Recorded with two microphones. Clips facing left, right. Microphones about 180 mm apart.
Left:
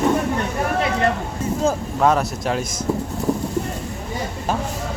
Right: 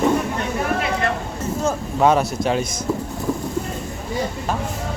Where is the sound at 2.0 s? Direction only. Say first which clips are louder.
Right 3 dB; centre (ahead or behind).